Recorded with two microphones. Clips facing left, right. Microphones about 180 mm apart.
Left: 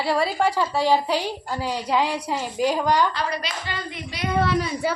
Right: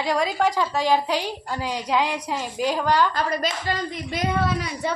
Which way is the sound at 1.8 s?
10° left (ahead or behind).